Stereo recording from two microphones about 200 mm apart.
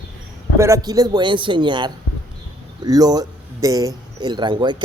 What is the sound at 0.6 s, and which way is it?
A man's voice, 15° right (ahead or behind).